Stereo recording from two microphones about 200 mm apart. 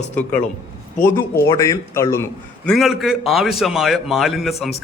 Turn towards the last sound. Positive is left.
turn(degrees=0)  # may be behind; listen again after turning